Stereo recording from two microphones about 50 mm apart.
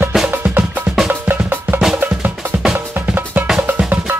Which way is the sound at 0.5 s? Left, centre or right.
Right.